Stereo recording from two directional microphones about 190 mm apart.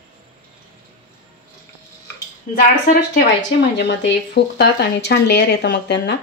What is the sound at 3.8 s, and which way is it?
Speech, 60° left (ahead or behind).